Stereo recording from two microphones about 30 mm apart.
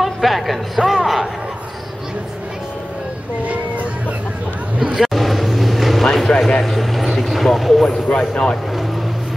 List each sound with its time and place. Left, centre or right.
0.0 s speech: centre
4.9 s vehicle: centre
6.3 s speech: left
6.6 s vehicle: centre
7.2 s speech: centre
8.1 s speech: left